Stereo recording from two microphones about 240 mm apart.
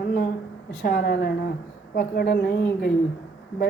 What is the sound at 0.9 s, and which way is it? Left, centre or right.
A woman's voice, left.